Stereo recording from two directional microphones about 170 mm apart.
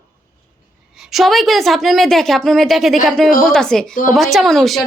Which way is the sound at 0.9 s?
Centre (ahead or behind).